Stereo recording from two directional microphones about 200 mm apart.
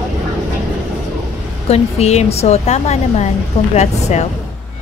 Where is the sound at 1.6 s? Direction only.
35° left (ahead or behind).